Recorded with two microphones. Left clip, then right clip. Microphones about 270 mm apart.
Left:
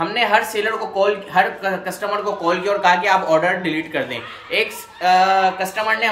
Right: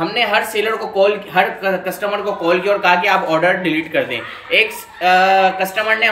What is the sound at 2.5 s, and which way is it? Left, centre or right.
Speech, centre.